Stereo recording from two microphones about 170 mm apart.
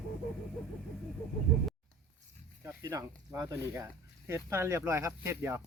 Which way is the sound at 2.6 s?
20° right (ahead or behind).